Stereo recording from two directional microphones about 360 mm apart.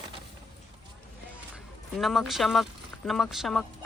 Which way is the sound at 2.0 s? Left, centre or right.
Centre.